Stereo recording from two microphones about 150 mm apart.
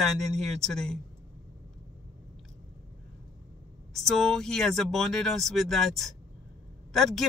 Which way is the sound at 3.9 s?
Centre (ahead or behind).